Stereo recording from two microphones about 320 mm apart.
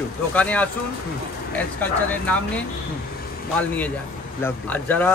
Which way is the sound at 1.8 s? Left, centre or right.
Centre.